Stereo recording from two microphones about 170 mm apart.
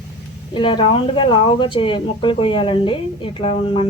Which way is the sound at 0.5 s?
30° left (ahead or behind).